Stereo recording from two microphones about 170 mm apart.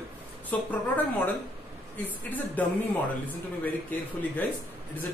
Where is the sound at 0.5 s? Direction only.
10° left (ahead or behind).